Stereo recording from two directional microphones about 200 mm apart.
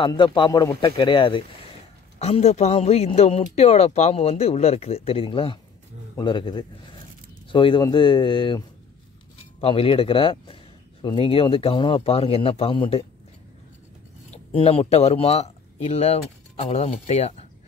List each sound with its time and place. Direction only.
0.0 s a man's voice: 25° left (ahead or behind)
14.3 s speech: 30° left (ahead or behind)